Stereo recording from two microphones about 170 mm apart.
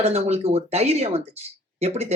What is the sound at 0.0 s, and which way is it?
Speech, 35° right (ahead or behind).